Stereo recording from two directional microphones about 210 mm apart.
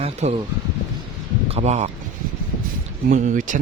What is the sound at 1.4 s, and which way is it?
Speech, 30° right (ahead or behind).